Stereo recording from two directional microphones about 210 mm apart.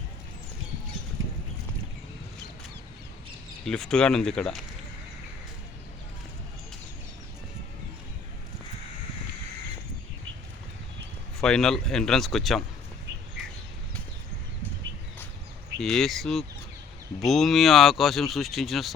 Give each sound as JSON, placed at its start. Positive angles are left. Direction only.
{"t": 1.2, "sound": "a sound", "side_deg": -70}
{"t": 3.7, "sound": "speech", "side_deg": 5}
{"t": 11.3, "sound": "speech", "side_deg": 0}
{"t": 15.8, "sound": "speech", "side_deg": 0}